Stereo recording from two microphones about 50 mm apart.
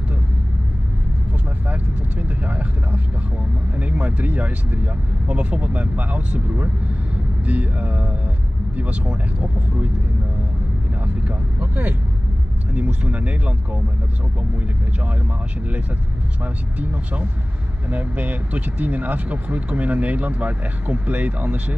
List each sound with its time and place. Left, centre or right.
1.7 s vehicle: right
5.3 s speech: right
11.2 s speech: right
16.8 s speech: right